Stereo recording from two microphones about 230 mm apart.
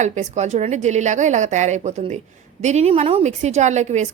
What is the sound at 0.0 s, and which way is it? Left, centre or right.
A woman's voice, right.